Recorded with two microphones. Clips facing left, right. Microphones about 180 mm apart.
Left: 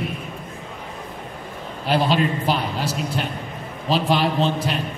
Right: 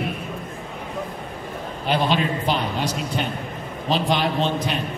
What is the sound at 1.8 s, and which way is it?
A man's voice, 5° left (ahead or behind).